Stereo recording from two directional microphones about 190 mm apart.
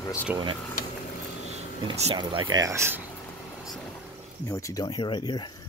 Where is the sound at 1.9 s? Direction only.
30° right (ahead or behind); by 3.0 s 15° right (ahead or behind).